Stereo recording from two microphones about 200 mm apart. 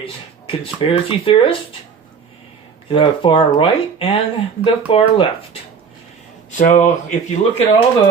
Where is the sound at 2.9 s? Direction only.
25° left (ahead or behind).